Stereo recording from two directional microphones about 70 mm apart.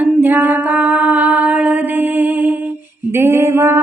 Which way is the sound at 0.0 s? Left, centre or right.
Right.